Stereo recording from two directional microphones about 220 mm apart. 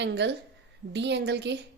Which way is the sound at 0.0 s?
50° right (ahead or behind).